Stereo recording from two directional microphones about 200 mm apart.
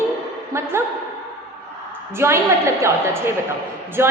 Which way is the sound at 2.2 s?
15° right (ahead or behind).